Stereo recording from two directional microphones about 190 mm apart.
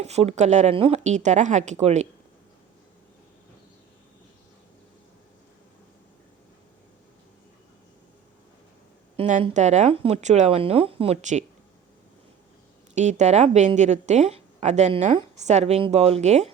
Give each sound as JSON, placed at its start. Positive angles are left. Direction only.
{"t": 0.0, "sound": "a woman's voice", "side_deg": -35}
{"t": 9.1, "sound": "a woman's voice", "side_deg": -35}
{"t": 12.9, "sound": "a woman's voice", "side_deg": -40}